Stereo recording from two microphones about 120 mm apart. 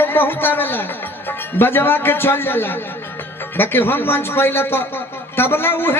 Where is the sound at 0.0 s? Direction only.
15° left (ahead or behind).